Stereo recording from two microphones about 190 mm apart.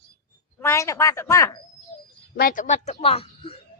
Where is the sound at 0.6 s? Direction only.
15° left (ahead or behind).